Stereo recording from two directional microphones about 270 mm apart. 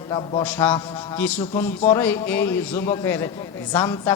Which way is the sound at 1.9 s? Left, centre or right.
Centre.